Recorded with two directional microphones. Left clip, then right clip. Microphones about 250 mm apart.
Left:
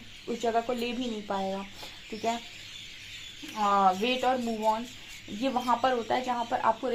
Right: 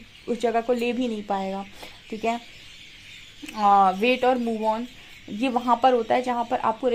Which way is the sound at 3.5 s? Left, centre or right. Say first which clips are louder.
Right 6 dB; right.